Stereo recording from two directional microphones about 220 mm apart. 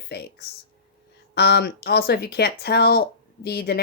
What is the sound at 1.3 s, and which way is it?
Speech, 50° left (ahead or behind).